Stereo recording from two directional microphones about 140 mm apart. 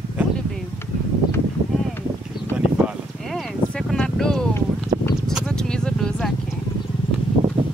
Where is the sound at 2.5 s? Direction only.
5° right (ahead or behind).